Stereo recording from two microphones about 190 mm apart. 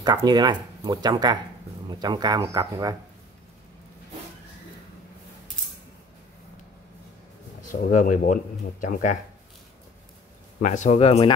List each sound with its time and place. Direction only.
0.0 s speech: 20° right (ahead or behind)
7.7 s speech: 45° left (ahead or behind)
10.6 s speech: 40° left (ahead or behind)